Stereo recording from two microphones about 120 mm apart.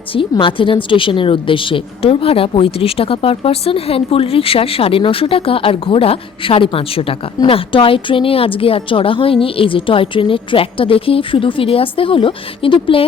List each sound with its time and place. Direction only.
0.1 s a woman's voice: 45° left (ahead or behind)